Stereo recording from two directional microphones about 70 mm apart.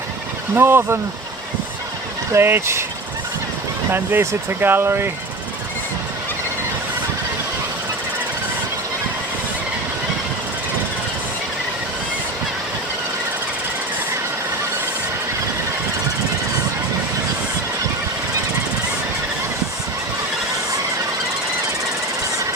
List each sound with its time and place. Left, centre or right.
0.5 s speech: right
2.3 s speech: right
3.9 s speech: right